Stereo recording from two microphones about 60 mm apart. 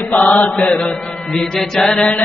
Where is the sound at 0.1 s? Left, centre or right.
Left.